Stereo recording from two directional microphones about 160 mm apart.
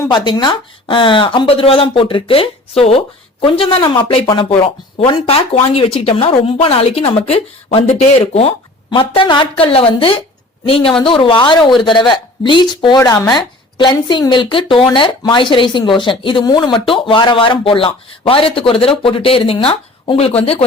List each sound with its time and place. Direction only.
0.1 s speech: 25° left (ahead or behind)